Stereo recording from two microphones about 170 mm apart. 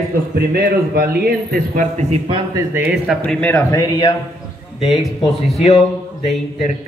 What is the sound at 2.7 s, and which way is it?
Speech, 10° right (ahead or behind).